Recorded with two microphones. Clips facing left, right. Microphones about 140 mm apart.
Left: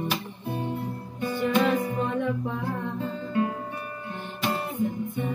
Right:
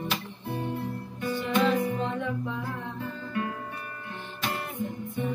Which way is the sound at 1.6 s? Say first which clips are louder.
Right 2 dB; 40° left (ahead or behind).